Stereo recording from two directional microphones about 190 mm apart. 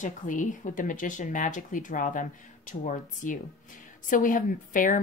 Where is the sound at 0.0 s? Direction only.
40° left (ahead or behind).